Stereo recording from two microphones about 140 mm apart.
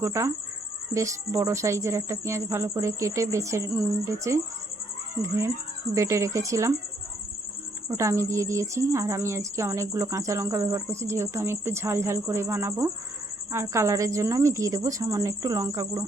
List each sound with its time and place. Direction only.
0.0 s a woman's voice: 20° right (ahead or behind)
5.9 s a woman's voice: 20° right (ahead or behind)
7.9 s a woman's voice: 20° right (ahead or behind)